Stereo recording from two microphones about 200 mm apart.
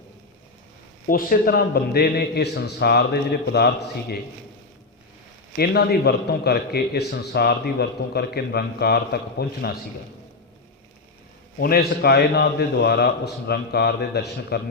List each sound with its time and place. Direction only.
1.0 s a man's voice: 45° left (ahead or behind)
5.5 s a man's voice: 50° left (ahead or behind)
11.6 s a man's voice: 50° left (ahead or behind)